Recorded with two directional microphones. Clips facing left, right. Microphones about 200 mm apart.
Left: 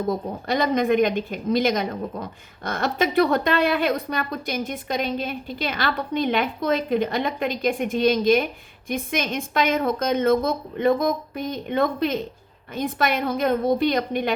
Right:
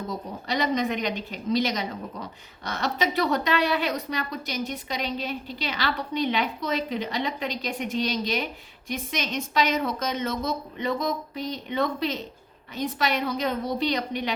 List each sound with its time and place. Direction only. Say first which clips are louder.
0.1 s a woman's voice: left 6 dB; 50° left (ahead or behind)